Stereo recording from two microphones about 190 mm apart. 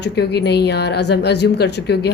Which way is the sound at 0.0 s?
60° left (ahead or behind).